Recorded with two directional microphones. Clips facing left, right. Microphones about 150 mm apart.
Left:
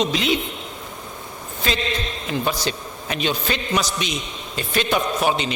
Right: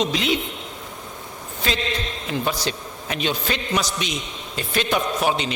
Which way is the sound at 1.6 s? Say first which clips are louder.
Left 1 dB; 10° left (ahead or behind).